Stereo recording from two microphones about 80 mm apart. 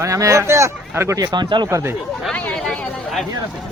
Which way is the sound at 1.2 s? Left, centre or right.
Right.